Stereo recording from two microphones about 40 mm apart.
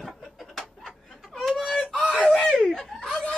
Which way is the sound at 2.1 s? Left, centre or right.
Centre.